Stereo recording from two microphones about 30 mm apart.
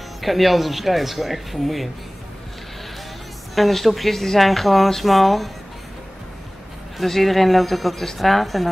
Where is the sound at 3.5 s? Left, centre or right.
Centre.